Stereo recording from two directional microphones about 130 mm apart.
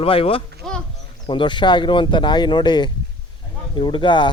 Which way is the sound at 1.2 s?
40° left (ahead or behind).